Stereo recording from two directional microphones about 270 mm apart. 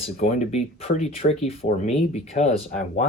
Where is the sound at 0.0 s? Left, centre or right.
Left.